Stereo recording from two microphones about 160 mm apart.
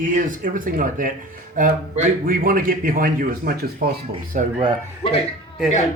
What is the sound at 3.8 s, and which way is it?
Speech, 90° right.